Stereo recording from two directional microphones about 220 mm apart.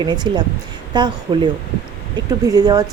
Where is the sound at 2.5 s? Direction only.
15° right (ahead or behind).